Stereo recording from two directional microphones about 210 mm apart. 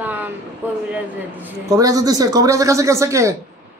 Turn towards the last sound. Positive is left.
turn(degrees=-15)  # may be behind; listen again after turning